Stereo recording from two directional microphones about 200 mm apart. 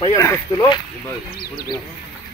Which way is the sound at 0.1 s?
15° left (ahead or behind).